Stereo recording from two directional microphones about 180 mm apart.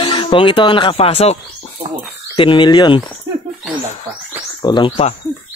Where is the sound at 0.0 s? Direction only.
30° left (ahead or behind).